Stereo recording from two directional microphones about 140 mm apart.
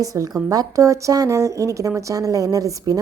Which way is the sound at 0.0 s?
25° right (ahead or behind).